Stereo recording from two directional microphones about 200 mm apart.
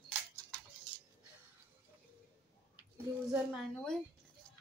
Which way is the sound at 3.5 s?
5° left (ahead or behind).